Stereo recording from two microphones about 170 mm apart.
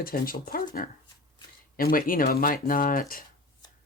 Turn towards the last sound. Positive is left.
turn(degrees=55)  # may be behind; listen again after turning